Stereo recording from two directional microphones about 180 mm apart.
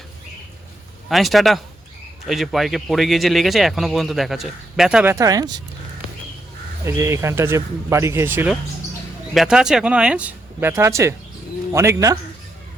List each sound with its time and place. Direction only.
1.0 s speech: centre (ahead or behind)
5.1 s speech: 20° right (ahead or behind)
6.8 s speech: 15° right (ahead or behind)